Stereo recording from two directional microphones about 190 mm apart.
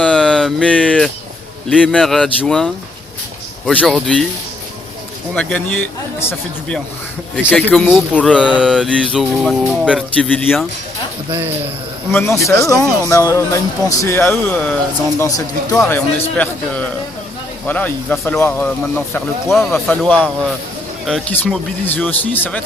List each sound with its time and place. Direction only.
0.0 s a sound: 5° left (ahead or behind)
1.7 s music: 5° left (ahead or behind)
3.7 s music: 5° left (ahead or behind)
5.3 s speech: 5° left (ahead or behind)
8.1 s music: 5° left (ahead or behind)
10.2 s music: 5° left (ahead or behind)
11.3 s speech: 10° right (ahead or behind)
12.5 s speech: 15° left (ahead or behind)